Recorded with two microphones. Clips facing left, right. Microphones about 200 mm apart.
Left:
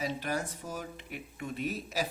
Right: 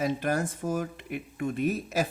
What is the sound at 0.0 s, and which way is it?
Speech, 50° right (ahead or behind).